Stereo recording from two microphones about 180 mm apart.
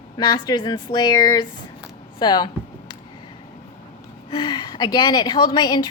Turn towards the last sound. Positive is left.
turn(degrees=25)  # may be behind; listen again after turning